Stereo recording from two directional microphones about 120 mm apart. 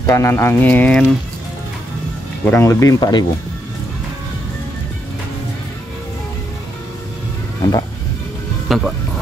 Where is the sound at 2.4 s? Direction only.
25° left (ahead or behind).